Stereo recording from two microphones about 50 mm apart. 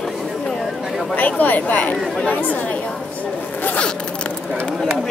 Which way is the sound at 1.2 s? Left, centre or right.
Left.